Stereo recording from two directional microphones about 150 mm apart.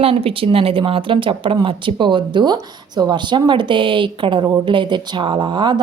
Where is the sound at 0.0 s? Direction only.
40° right (ahead or behind).